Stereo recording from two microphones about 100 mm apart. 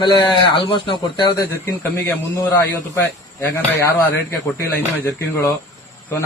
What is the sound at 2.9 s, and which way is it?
Speech, 25° left (ahead or behind).